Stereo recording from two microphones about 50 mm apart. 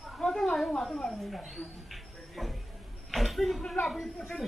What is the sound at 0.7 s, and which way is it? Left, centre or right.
Speech, centre.